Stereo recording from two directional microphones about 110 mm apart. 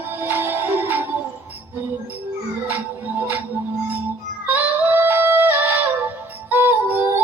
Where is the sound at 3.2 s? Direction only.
15° right (ahead or behind).